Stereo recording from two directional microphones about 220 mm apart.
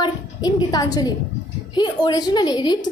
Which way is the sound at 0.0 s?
20° left (ahead or behind).